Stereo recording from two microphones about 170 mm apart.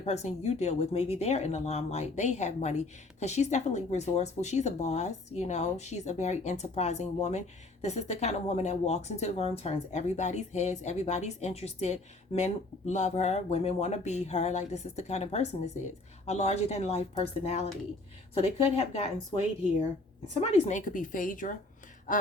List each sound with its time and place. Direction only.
0.0 s speech: 40° left (ahead or behind)
20.4 s speech: 45° left (ahead or behind)